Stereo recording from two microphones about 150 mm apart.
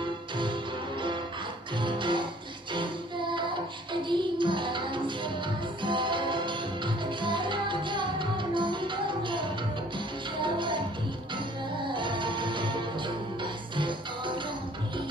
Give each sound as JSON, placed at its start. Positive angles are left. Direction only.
{"t": 1.8, "sound": "music", "side_deg": -30}
{"t": 11.9, "sound": "music", "side_deg": -30}